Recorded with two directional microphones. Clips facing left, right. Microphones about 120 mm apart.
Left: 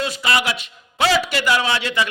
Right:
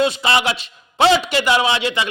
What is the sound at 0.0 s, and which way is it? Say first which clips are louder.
A man's voice: right 4 dB; 25° right (ahead or behind).